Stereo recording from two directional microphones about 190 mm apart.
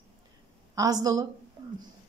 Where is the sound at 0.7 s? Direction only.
20° right (ahead or behind).